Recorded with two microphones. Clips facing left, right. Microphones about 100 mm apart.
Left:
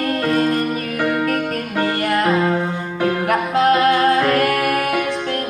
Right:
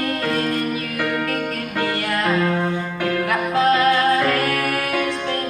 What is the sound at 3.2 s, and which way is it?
Music, 60° left (ahead or behind).